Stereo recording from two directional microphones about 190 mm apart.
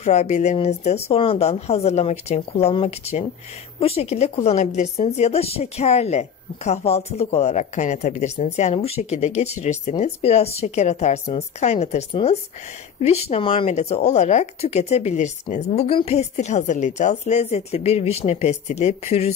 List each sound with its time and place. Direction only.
0.0 s a woman's voice: 35° left (ahead or behind)